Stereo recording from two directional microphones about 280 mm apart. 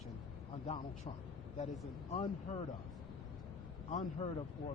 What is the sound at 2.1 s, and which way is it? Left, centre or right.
Speech, centre.